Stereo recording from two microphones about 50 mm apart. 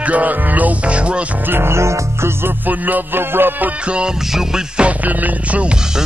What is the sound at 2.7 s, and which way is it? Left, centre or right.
Music, right.